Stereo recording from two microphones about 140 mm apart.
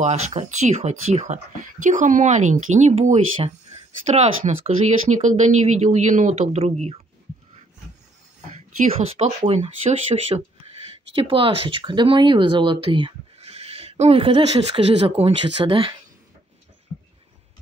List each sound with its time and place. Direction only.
0.0 s speech: 50° right (ahead or behind)
9.1 s speech: 45° right (ahead or behind)
13.4 s speech: 45° right (ahead or behind)